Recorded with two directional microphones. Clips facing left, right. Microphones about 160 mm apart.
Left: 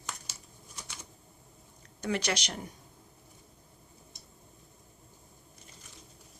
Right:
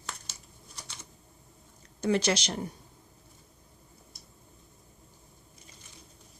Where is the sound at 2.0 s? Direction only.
30° right (ahead or behind).